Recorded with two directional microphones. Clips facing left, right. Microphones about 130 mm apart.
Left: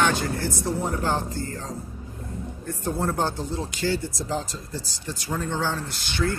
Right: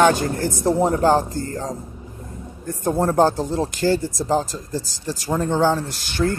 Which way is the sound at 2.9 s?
45° right (ahead or behind).